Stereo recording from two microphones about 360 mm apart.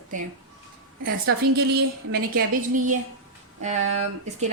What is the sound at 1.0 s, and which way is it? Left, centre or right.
A woman's voice, right.